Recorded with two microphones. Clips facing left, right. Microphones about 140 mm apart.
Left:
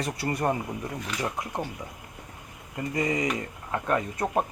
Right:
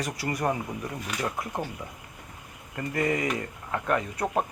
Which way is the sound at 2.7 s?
15° left (ahead or behind).